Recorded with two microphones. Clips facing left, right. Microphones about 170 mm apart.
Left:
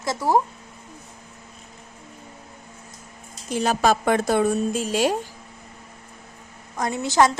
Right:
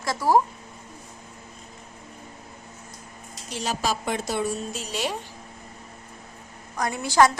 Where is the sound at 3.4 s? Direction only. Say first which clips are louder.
Left 7 dB; 55° left (ahead or behind).